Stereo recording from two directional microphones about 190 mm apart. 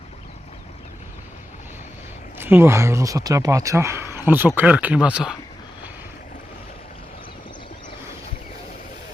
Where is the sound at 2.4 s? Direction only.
10° right (ahead or behind).